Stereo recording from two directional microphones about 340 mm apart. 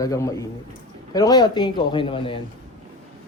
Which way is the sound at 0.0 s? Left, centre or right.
Centre.